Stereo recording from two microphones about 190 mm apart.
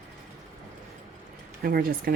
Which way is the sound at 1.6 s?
55° right (ahead or behind).